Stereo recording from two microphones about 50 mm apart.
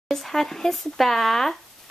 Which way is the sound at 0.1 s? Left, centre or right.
Centre.